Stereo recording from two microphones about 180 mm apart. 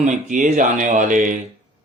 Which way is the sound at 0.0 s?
45° right (ahead or behind).